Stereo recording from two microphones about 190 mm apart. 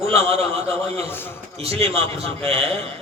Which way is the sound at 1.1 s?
10° left (ahead or behind).